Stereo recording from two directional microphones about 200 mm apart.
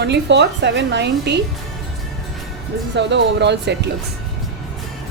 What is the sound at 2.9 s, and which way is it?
Speech, 60° right (ahead or behind).